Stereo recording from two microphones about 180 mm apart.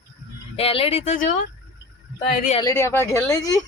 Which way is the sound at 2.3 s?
45° left (ahead or behind).